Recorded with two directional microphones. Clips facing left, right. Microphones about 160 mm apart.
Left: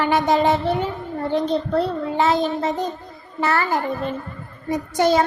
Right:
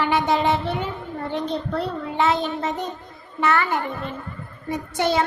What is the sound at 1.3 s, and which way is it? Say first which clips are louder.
Child singing: left 6 dB; 35° left (ahead or behind).